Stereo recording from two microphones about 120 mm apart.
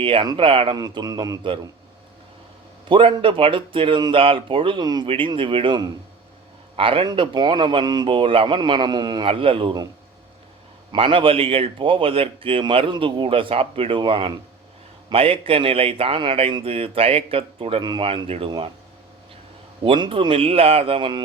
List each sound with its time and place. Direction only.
0.0 s speech: 45° right (ahead or behind)
0.8 s speech: 35° right (ahead or behind)
2.9 s speech: 45° right (ahead or behind)
5.0 s speech: 45° right (ahead or behind)
9.2 s speech: 50° right (ahead or behind)
10.9 s speech: 45° right (ahead or behind)
19.8 s speech: 45° right (ahead or behind)